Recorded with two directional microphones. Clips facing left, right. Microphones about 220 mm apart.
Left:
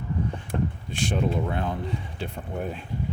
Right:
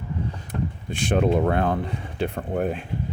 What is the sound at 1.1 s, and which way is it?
Speech, 60° right (ahead or behind).